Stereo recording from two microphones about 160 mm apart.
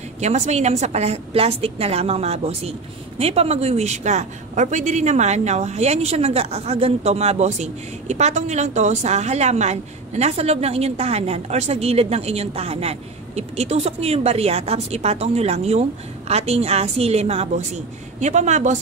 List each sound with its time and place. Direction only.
0.2 s a woman's voice: 45° right (ahead or behind)